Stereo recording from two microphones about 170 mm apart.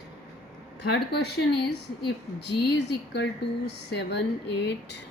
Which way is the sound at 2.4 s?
80° left.